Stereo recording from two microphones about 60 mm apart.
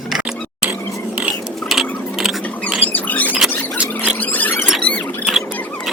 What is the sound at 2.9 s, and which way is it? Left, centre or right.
Mouse, left.